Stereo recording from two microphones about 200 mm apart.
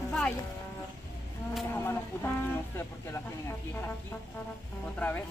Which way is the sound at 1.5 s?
10° left (ahead or behind).